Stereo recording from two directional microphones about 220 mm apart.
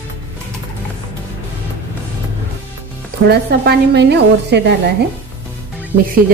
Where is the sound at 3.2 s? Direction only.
45° right (ahead or behind).